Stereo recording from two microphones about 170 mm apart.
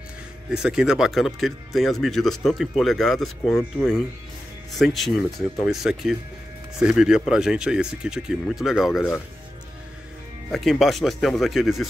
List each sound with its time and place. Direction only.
0.5 s speech: 5° right (ahead or behind)
10.5 s speech: centre (ahead or behind)